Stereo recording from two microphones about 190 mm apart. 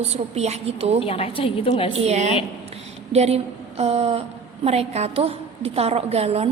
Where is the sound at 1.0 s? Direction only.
30° left (ahead or behind).